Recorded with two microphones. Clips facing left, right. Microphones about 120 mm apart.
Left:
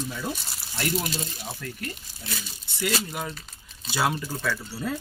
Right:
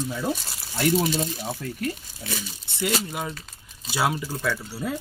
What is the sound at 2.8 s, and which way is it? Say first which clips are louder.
Speech: right 2 dB; 15° right (ahead or behind).